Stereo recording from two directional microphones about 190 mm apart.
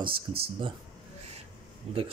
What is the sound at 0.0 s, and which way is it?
Speech, 30° right (ahead or behind).